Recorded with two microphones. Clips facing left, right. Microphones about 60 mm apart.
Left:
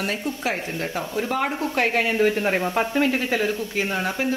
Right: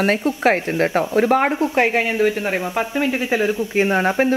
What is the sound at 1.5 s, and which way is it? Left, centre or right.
Speech, right.